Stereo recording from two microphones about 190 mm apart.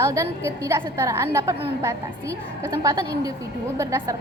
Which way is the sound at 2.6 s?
15° right (ahead or behind).